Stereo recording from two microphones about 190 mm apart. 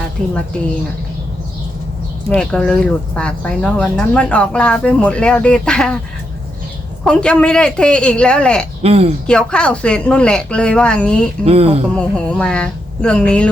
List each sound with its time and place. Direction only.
2.3 s speech: 5° left (ahead or behind)
7.0 s speech: 5° left (ahead or behind)
8.8 s speech: 30° right (ahead or behind)
9.2 s speech: 5° left (ahead or behind)
11.4 s speech: 30° right (ahead or behind)
11.9 s speech: 5° left (ahead or behind)